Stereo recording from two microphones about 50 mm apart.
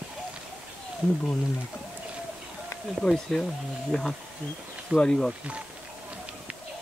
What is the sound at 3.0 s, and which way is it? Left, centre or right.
Speech, centre.